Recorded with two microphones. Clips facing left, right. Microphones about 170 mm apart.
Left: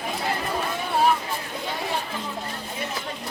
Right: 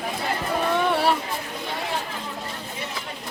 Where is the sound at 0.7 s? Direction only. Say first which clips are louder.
Even; 80° right.